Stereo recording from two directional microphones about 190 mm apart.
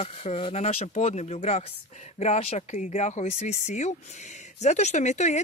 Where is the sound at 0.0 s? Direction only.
30° left (ahead or behind).